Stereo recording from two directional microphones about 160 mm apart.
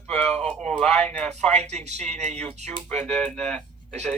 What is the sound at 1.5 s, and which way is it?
Speech, 45° right (ahead or behind).